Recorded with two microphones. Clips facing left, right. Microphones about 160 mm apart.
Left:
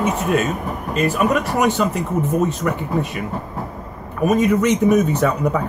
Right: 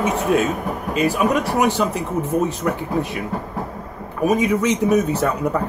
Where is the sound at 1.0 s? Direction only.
5° right (ahead or behind).